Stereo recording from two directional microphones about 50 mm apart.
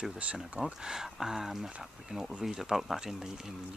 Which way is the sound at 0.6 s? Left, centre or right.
Centre.